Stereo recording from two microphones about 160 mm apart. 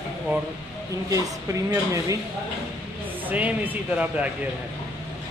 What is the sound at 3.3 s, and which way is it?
Speech, 10° right (ahead or behind).